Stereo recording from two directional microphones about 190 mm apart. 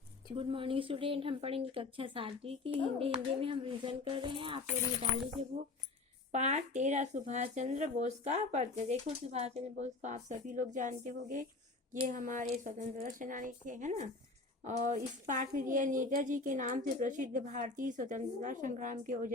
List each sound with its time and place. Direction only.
0.3 s a woman's voice: 30° right (ahead or behind); by 19.3 s 45° right (ahead or behind)